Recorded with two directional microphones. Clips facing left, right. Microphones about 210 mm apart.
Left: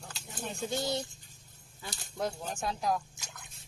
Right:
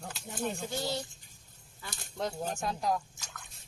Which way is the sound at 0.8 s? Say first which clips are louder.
Left 2 dB; 20° left (ahead or behind).